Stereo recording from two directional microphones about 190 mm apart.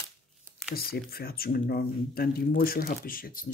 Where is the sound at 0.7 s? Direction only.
55° left (ahead or behind).